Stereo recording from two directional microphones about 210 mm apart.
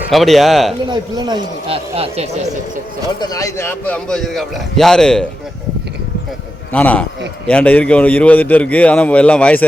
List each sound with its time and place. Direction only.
0.1 s a man's voice: centre (ahead or behind)
0.9 s speech: 20° right (ahead or behind)
3.2 s a man's voice: 15° left (ahead or behind)
6.7 s a man's voice: 5° left (ahead or behind)